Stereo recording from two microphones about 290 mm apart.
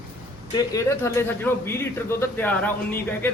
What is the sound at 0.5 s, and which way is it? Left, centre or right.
A man's voice, centre.